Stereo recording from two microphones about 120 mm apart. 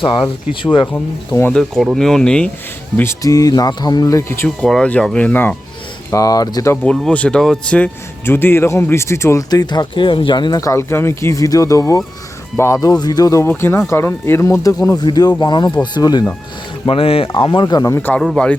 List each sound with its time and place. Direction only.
0.6 s speech: 40° left (ahead or behind)
1.5 s speech: centre (ahead or behind)
3.0 s speech: 25° left (ahead or behind)
4.4 s speech: 5° left (ahead or behind)
6.1 s speech: 30° left (ahead or behind)
6.8 s speech: 5° left (ahead or behind); by 9.4 s 25° left (ahead or behind)
9.5 s speech: 35° left (ahead or behind)
16.8 s speech: 50° left (ahead or behind); by 17.9 s 35° left (ahead or behind)
17.9 s speech: 15° left (ahead or behind)